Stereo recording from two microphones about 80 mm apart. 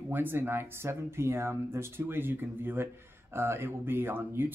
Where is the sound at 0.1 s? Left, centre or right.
Right.